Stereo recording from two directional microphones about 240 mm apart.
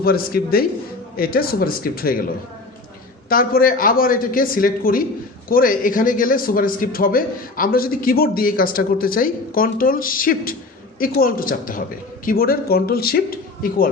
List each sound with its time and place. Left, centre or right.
0.0 s a man's voice: left